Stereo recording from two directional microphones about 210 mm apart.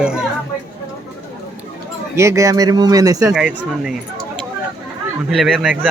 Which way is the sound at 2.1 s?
15° right (ahead or behind).